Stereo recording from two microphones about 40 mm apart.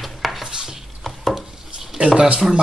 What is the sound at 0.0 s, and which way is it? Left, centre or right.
Dishes, centre.